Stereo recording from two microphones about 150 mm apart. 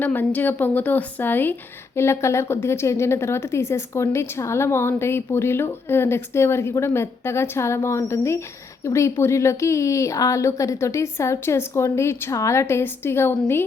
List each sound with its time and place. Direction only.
0.0 s a woman's voice: 15° left (ahead or behind)